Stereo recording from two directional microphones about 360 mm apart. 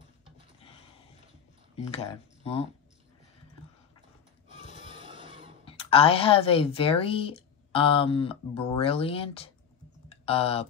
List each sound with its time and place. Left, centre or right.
1.8 s speech: centre
4.7 s printer: centre
5.7 s speech: centre